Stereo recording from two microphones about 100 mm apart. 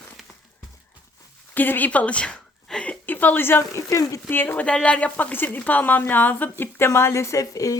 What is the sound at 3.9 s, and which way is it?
Speech, 35° left (ahead or behind).